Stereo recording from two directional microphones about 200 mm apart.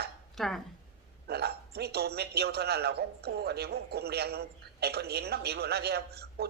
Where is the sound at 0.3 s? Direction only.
Centre (ahead or behind).